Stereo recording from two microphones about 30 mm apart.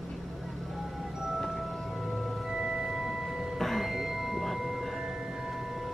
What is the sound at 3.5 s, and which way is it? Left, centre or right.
Music, centre.